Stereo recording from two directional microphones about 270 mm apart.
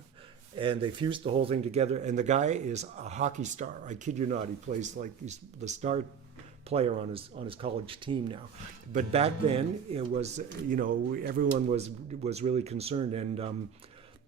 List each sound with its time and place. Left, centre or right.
0.5 s speech: centre